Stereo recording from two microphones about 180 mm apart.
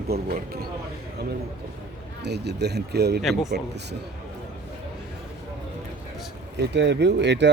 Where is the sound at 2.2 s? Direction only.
70° right (ahead or behind).